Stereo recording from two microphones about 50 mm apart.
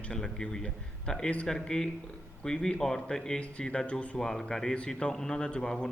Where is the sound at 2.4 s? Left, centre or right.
Centre.